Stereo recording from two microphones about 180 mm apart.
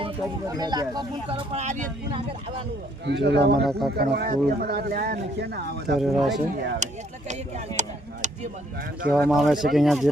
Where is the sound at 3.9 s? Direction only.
60° right (ahead or behind).